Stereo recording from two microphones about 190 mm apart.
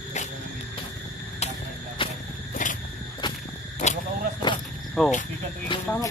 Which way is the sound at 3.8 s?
40° left (ahead or behind).